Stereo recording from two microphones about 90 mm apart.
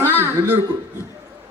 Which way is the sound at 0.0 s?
25° right (ahead or behind).